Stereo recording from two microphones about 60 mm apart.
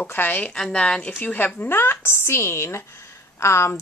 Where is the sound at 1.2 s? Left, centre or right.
Left.